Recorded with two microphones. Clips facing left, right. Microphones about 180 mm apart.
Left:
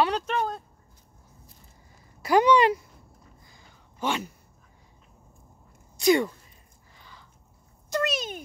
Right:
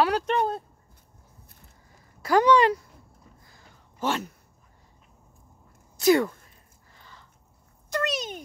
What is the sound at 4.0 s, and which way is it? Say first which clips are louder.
Speech: right 1 dB; centre (ahead or behind).